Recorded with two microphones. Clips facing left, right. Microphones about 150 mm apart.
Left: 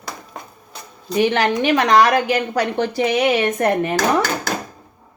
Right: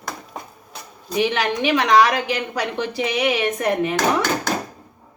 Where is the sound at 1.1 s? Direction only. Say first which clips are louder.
Left 4 dB; 55° left (ahead or behind).